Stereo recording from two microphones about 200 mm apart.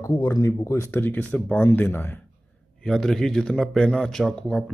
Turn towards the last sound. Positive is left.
turn(degrees=5)  # may be behind; listen again after turning